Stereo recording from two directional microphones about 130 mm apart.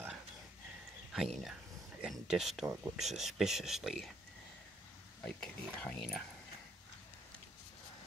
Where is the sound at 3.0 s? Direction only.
Centre (ahead or behind).